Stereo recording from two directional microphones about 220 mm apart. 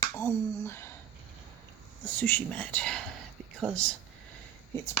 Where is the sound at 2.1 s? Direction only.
5° left (ahead or behind).